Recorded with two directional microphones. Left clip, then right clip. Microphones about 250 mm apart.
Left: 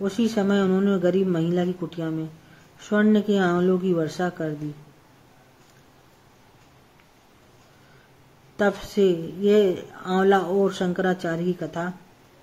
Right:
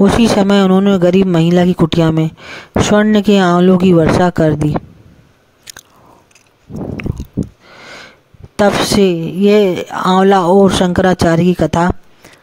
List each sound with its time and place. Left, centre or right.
0.0 s speech: right
8.5 s speech: right